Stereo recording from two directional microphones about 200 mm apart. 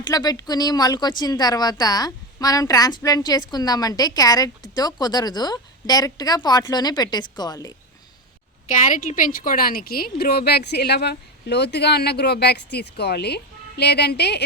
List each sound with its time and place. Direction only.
0.0 s speech: 20° left (ahead or behind)
8.6 s a woman's voice: 40° left (ahead or behind); by 14.4 s 55° left (ahead or behind)